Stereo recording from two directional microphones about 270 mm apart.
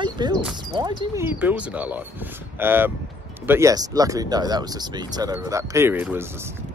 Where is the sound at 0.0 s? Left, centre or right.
Centre.